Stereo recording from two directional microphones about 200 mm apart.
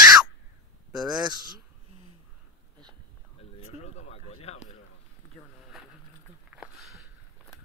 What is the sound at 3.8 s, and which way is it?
Speech, 35° left (ahead or behind).